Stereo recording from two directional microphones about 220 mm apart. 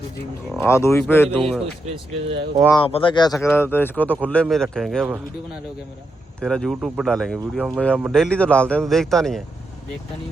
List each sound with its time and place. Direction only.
0.6 s speech: 10° left (ahead or behind)
2.7 s speech: 25° left (ahead or behind)
3.4 s speech: 10° left (ahead or behind)
6.4 s speech: centre (ahead or behind)